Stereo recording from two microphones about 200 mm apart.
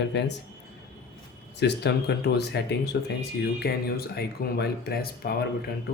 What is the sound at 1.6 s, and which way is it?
Speech, 55° left (ahead or behind).